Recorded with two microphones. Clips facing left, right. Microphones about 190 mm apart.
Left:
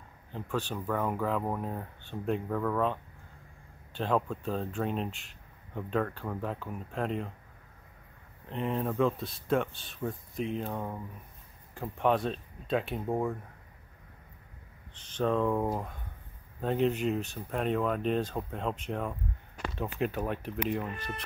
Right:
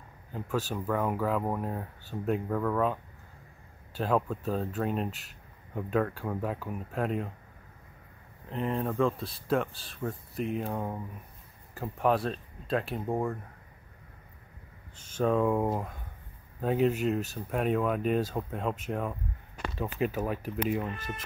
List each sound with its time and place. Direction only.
0.3 s speech: 5° right (ahead or behind)
8.5 s speech: centre (ahead or behind)
15.0 s speech: 10° right (ahead or behind)